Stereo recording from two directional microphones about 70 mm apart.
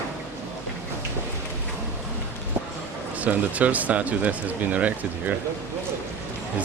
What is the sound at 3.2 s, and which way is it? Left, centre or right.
Speech, right.